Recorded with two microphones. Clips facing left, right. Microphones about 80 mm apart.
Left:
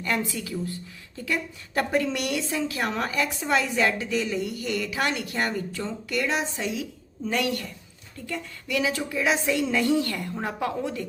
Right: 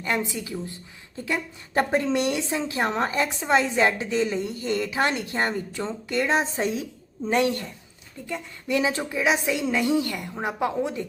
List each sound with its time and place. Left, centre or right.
0.0 s a woman's voice: right